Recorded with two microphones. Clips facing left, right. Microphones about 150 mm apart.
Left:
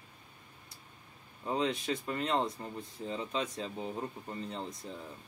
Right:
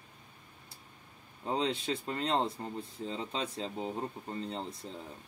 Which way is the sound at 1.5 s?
30° right (ahead or behind).